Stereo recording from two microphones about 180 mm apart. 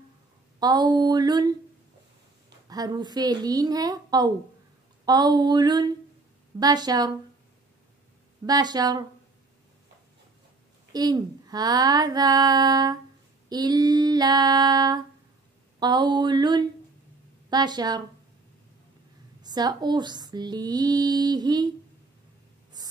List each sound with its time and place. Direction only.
0.6 s speech: 25° right (ahead or behind)
2.7 s speech: 20° right (ahead or behind)
8.5 s speech: 20° right (ahead or behind)
10.9 s speech: 20° right (ahead or behind)
19.4 s speech: 20° right (ahead or behind)
22.8 s a sound: 20° right (ahead or behind)